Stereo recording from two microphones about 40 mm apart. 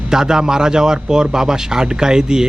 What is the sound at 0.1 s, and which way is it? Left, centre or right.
Speech, centre.